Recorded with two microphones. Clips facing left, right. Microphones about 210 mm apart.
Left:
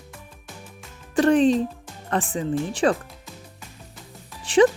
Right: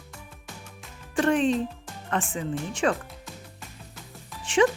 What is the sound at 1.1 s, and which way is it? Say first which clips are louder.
Speech: left 5 dB; 35° left (ahead or behind).